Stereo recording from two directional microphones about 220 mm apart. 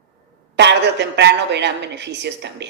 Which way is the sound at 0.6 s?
50° right (ahead or behind).